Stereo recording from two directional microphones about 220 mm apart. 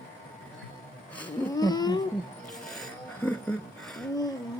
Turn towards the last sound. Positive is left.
turn(degrees=5)  # may be behind; listen again after turning